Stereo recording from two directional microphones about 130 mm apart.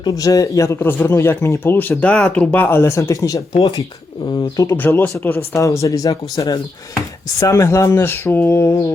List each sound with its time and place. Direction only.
0.0 s a man's voice: 25° left (ahead or behind)
4.8 s a man's voice: 15° left (ahead or behind)